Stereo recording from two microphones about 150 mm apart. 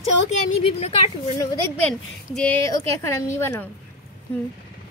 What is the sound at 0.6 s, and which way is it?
Speech, 40° left (ahead or behind).